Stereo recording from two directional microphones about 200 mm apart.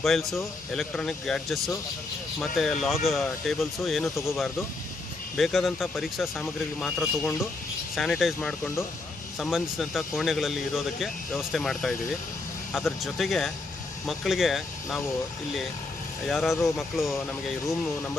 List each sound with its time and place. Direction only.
0.0 s speech: centre (ahead or behind)
16.3 s speech: centre (ahead or behind)